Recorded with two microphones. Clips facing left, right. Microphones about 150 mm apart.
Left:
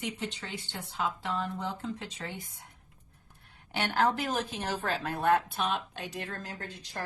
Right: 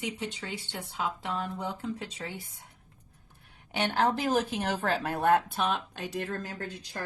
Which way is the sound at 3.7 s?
20° right (ahead or behind).